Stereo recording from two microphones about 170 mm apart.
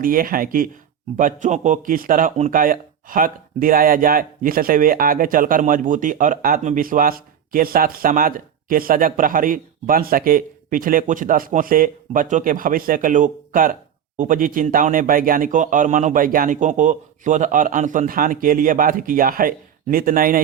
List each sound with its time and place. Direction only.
0.0 s speech: 55° right (ahead or behind)
1.1 s speech: 45° right (ahead or behind)